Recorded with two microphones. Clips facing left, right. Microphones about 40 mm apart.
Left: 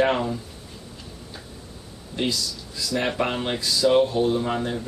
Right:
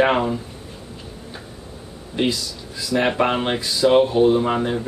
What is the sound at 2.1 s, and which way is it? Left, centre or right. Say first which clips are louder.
Speech: right 4 dB; right.